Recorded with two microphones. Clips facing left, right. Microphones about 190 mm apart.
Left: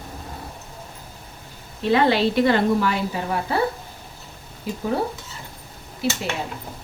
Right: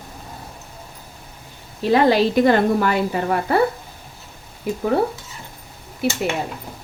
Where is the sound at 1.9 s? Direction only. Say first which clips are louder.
Right 3 dB; 40° right (ahead or behind); by 3.6 s 55° right (ahead or behind).